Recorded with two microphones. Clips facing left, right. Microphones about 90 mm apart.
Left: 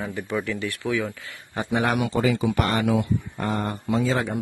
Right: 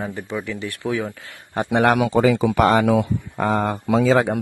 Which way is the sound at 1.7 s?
75° right (ahead or behind).